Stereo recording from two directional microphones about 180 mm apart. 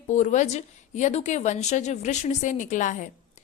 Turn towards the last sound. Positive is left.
turn(degrees=45)  # may be behind; listen again after turning